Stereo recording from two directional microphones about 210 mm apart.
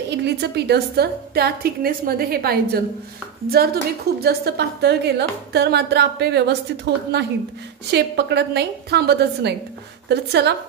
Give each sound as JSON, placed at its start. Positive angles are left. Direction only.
{"t": 0.2, "sound": "a woman's voice", "side_deg": -50}